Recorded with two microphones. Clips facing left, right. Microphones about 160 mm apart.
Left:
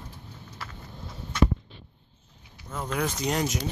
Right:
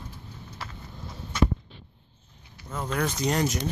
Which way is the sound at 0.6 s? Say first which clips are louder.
Right 1 dB; 25° right (ahead or behind).